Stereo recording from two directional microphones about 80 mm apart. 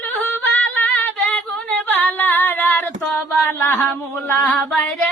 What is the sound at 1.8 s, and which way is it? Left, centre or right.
Female singing, left.